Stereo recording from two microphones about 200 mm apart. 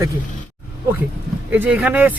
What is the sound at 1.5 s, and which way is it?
Speech, 10° right (ahead or behind).